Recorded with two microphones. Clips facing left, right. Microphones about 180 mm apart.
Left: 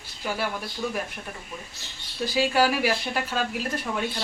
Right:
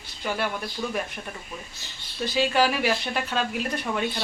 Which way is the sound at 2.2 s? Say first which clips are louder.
Even; 5° left (ahead or behind).